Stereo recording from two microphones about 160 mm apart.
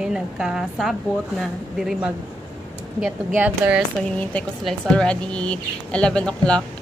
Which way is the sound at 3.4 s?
10° right (ahead or behind).